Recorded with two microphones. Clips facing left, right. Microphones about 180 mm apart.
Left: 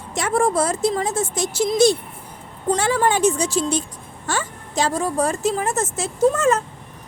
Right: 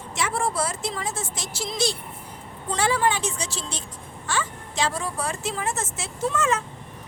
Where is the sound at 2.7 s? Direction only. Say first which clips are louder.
Left 4 dB; 45° left (ahead or behind).